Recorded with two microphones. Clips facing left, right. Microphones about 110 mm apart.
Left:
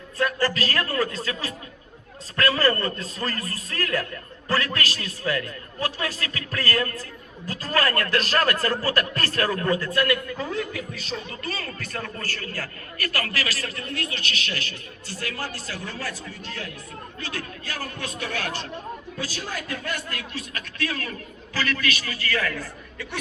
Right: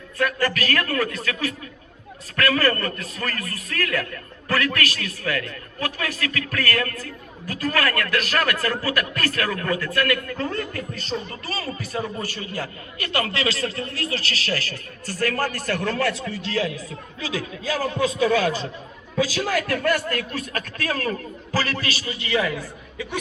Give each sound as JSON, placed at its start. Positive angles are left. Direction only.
{"t": 0.2, "sound": "a man's voice", "side_deg": 25}
{"t": 10.2, "sound": "a man's voice", "side_deg": 5}
{"t": 19.3, "sound": "a man's voice", "side_deg": -90}